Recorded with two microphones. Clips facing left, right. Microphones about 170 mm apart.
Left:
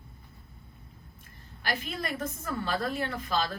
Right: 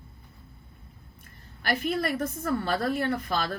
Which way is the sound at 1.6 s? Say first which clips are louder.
Right 6 dB; 55° right (ahead or behind).